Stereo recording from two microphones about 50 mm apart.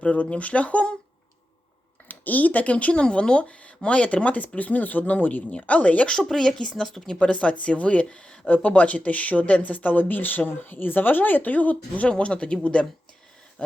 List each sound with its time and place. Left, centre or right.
0.0 s speech: left
2.0 s speech: left
6.1 s speech: centre
7.2 s speech: left
13.6 s a sound: left